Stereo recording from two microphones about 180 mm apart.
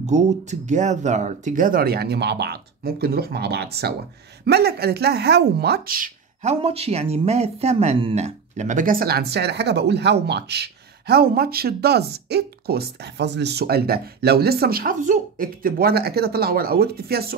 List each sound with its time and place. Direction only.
0.0 s speech: 40° right (ahead or behind)
6.6 s speech: 35° right (ahead or behind); by 17.4 s 60° right (ahead or behind)